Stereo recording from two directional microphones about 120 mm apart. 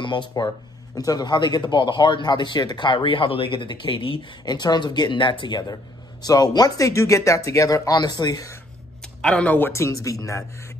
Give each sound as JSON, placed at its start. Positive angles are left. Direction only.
{"t": 0.0, "sound": "a man's voice", "side_deg": 40}
{"t": 9.0, "sound": "speech", "side_deg": 10}